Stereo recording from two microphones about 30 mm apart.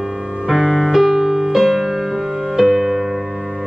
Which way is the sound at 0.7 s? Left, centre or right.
Centre.